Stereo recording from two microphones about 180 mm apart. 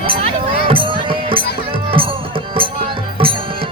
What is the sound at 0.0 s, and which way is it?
Music, 30° right (ahead or behind).